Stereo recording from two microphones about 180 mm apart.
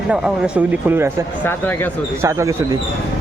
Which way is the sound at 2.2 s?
15° right (ahead or behind).